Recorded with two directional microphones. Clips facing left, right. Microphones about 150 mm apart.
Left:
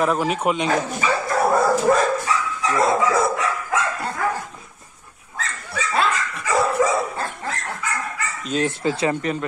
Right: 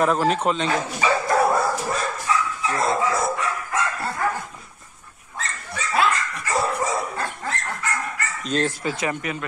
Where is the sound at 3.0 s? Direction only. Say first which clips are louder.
Left 3 dB; 90° left.